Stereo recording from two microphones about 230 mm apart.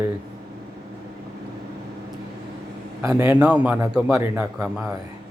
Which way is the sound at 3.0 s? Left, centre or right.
Centre.